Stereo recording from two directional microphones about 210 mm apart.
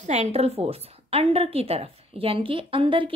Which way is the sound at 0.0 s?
35° right (ahead or behind).